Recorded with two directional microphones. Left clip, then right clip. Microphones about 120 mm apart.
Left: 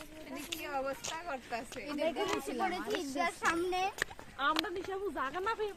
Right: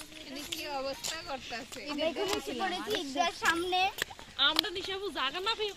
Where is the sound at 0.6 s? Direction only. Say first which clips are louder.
Even; 40° left (ahead or behind).